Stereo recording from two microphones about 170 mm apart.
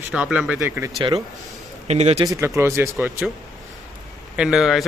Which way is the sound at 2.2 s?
20° right (ahead or behind).